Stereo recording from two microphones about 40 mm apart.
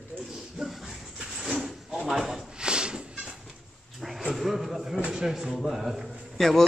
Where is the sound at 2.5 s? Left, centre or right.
Right.